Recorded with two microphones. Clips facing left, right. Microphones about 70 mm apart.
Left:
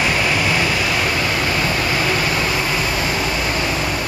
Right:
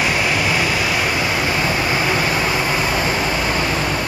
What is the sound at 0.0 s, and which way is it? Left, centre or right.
Waves, centre.